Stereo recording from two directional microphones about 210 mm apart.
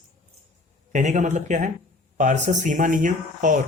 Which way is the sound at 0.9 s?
35° right (ahead or behind).